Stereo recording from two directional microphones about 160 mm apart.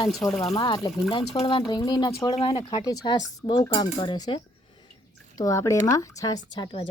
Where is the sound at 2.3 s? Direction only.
35° left (ahead or behind).